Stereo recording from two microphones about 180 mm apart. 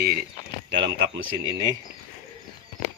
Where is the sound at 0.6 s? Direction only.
80° right.